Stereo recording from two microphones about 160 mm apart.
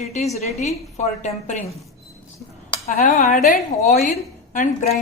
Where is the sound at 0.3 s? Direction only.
45° left (ahead or behind).